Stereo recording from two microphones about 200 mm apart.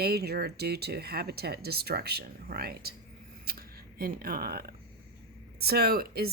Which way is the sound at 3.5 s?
50° right (ahead or behind).